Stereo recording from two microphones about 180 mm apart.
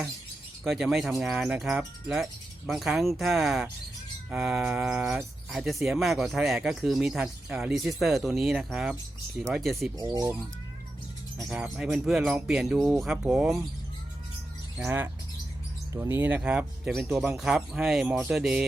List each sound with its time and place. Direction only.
0.6 s speech: centre (ahead or behind)
10.0 s speech: 20° right (ahead or behind)
11.4 s speech: 5° right (ahead or behind)
14.8 s speech: 15° right (ahead or behind)